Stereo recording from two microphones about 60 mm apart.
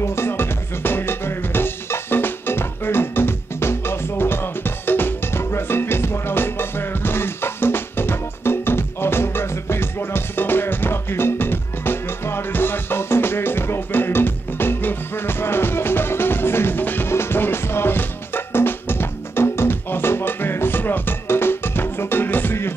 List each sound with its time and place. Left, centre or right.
0.0 s music: left